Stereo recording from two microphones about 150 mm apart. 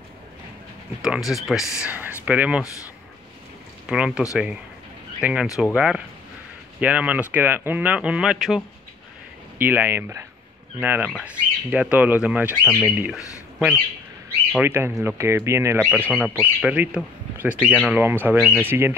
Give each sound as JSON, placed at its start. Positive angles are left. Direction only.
{"t": 1.0, "sound": "speech", "side_deg": 0}
{"t": 3.8, "sound": "speech", "side_deg": -5}
{"t": 9.6, "sound": "speech", "side_deg": -15}
{"t": 14.6, "sound": "speech", "side_deg": -15}
{"t": 16.1, "sound": "speech", "side_deg": -5}